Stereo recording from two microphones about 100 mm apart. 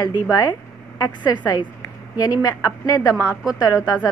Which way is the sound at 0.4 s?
40° left (ahead or behind).